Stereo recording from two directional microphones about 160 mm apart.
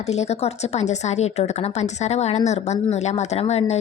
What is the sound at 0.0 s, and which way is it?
Speech, 45° left (ahead or behind).